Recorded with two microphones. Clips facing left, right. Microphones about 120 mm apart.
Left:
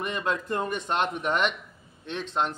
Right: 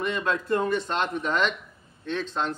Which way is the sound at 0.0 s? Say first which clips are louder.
Right 2 dB; 15° left (ahead or behind).